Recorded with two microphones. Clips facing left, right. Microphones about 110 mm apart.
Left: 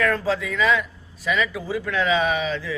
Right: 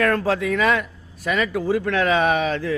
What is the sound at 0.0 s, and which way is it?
A man's voice, 55° right (ahead or behind).